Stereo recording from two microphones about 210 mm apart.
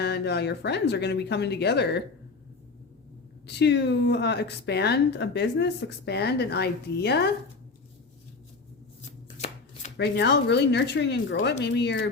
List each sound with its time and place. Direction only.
0.0 s speech: 50° left (ahead or behind)
3.4 s speech: 55° left (ahead or behind)
9.2 s chopping: 30° left (ahead or behind)
10.0 s speech: 55° left (ahead or behind)